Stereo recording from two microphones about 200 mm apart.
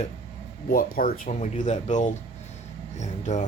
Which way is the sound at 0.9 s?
45° left (ahead or behind).